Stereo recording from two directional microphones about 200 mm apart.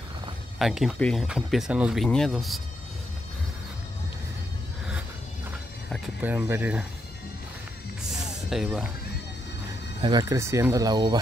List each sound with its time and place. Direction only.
0.6 s speech: centre (ahead or behind)
6.2 s speech: 10° right (ahead or behind)
8.0 s music: centre (ahead or behind)
10.0 s speech: 20° right (ahead or behind)